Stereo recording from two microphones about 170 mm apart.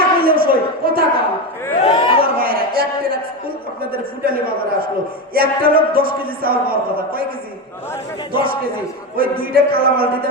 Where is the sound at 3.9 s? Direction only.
60° right (ahead or behind).